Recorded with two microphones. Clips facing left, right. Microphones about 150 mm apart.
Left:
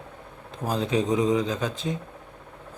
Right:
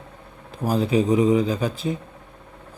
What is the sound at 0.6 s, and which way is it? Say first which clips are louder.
A man's voice: right 5 dB; 10° right (ahead or behind).